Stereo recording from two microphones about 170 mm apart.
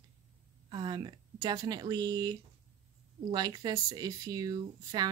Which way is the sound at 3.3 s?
25° right (ahead or behind).